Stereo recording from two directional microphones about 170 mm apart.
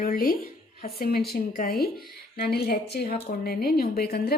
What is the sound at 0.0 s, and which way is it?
A woman's voice, 60° left (ahead or behind).